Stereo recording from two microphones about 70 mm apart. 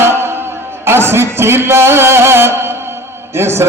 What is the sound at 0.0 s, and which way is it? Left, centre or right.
Music, right.